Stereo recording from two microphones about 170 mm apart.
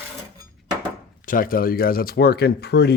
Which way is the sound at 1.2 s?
55° left (ahead or behind).